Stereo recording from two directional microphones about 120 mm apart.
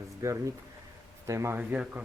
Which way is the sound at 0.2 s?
25° right (ahead or behind).